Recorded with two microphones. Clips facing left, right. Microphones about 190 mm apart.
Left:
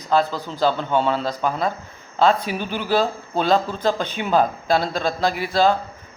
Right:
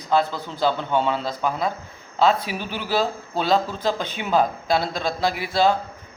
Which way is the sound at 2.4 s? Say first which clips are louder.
Left 4 dB; 45° left (ahead or behind).